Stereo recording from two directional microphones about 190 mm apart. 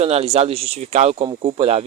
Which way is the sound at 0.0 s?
35° right (ahead or behind).